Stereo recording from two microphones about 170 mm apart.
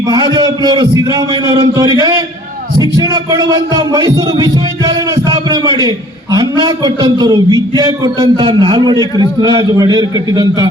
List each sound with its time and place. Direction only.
0.1 s speech: 25° right (ahead or behind)